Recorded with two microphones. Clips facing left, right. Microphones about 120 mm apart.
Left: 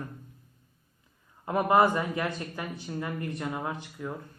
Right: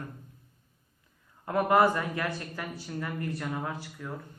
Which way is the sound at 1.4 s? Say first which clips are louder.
Left 1 dB; 20° left (ahead or behind).